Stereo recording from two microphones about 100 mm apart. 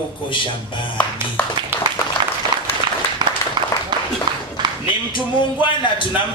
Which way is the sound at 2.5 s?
50° right (ahead or behind).